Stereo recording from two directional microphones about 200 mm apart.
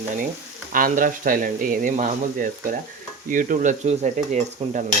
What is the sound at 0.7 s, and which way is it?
Speech, 45° right (ahead or behind).